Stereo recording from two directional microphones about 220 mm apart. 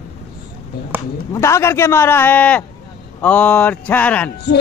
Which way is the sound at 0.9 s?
10° right (ahead or behind).